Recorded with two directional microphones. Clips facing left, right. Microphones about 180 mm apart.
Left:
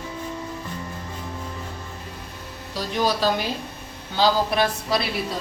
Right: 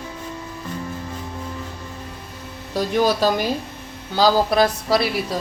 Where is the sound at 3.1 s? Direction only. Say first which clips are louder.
Right 4 dB; 45° right (ahead or behind).